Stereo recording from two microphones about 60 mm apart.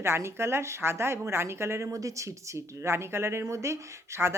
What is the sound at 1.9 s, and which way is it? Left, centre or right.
Speech, right.